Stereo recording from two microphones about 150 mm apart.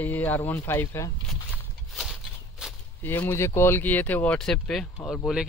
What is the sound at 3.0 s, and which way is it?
Speech, 15° left (ahead or behind).